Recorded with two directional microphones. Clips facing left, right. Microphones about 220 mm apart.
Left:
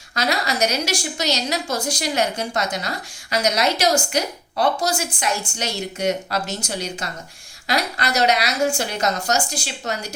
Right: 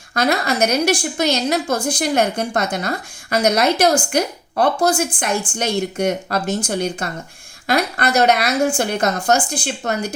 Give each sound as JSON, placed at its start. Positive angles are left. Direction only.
{"t": 0.1, "sound": "a woman's voice", "side_deg": -55}